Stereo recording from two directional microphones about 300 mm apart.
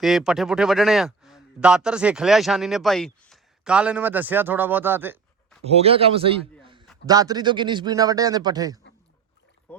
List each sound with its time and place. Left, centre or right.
0.0 s a man's voice: centre
5.6 s a man's voice: centre
9.7 s speech: centre